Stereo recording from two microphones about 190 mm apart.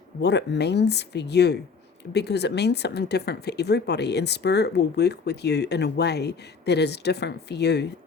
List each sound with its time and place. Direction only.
0.2 s speech: 60° left (ahead or behind)